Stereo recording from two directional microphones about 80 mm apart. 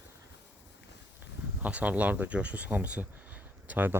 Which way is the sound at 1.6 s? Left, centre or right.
Centre.